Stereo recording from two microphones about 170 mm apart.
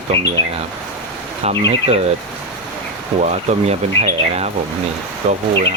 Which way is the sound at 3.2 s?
40° right (ahead or behind).